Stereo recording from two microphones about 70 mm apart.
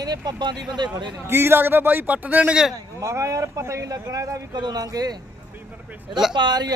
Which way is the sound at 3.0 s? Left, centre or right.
Right.